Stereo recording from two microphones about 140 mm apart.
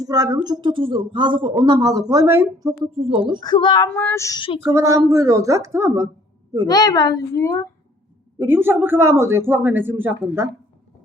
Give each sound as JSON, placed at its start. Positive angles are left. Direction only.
{"t": 0.0, "sound": "speech", "side_deg": -25}
{"t": 2.9, "sound": "speech", "side_deg": -40}
{"t": 3.4, "sound": "speech", "side_deg": 30}
{"t": 3.8, "sound": "child singing", "side_deg": 10}
{"t": 4.4, "sound": "speech", "side_deg": 40}
{"t": 4.6, "sound": "a woman's voice", "side_deg": -20}
{"t": 6.7, "sound": "a woman's voice", "side_deg": 25}
{"t": 8.4, "sound": "speech", "side_deg": -15}